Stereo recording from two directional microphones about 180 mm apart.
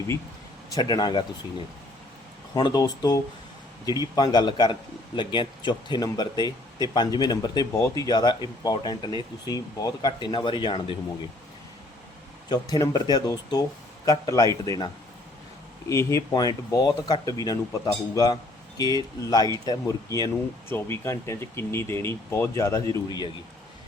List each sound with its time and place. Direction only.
0.7 s a man's voice: 20° left (ahead or behind)
12.5 s a man's voice: 20° left (ahead or behind)
15.9 s a man's voice: 15° left (ahead or behind)